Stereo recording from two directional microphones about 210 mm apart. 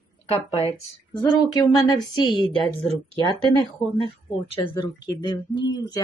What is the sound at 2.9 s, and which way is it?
Speech, 25° right (ahead or behind).